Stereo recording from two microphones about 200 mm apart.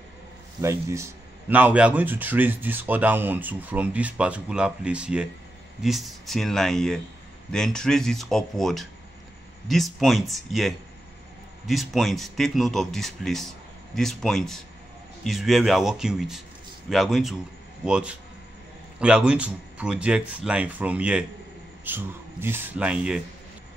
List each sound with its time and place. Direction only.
0.6 s speech: 15° right (ahead or behind)